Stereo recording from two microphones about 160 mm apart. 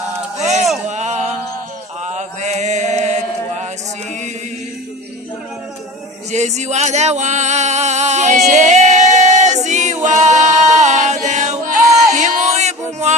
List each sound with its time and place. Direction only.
0.4 s a sound: centre (ahead or behind)
0.9 s male singing: 45° right (ahead or behind)
2.0 s chant: 45° right (ahead or behind)
6.3 s a sound: 45° right (ahead or behind)
9.6 s a capella: 45° right (ahead or behind)
12.1 s music: 50° right (ahead or behind)